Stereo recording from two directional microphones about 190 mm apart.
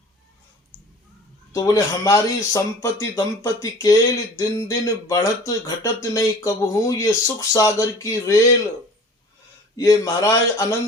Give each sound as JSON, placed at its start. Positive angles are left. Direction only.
{"t": 1.5, "sound": "speech", "side_deg": 15}
{"t": 9.7, "sound": "speech", "side_deg": 20}